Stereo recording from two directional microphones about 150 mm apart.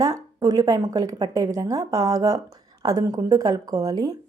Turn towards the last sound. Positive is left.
turn(degrees=-25)  # may be behind; listen again after turning